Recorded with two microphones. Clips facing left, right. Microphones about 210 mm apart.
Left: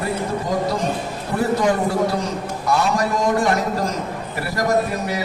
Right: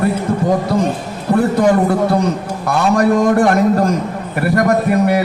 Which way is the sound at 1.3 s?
65° right (ahead or behind).